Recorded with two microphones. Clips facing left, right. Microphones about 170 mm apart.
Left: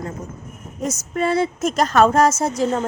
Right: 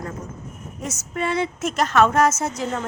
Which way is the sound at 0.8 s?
40° left (ahead or behind).